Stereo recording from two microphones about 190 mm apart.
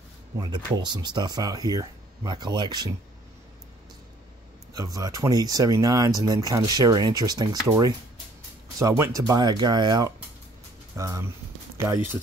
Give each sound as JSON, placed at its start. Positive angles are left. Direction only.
{"t": 0.4, "sound": "speech", "side_deg": -20}
{"t": 4.7, "sound": "speech", "side_deg": -20}
{"t": 11.8, "sound": "speech", "side_deg": 0}